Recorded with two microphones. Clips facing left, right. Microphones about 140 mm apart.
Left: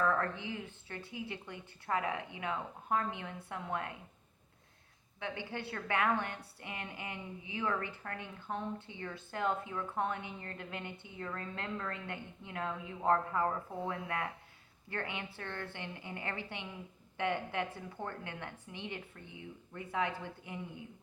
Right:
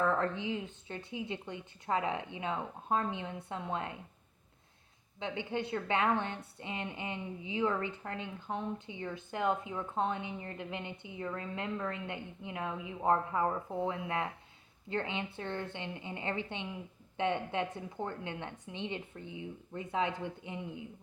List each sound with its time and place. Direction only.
0.0 s a woman's voice: 20° right (ahead or behind)
5.2 s a woman's voice: 20° right (ahead or behind)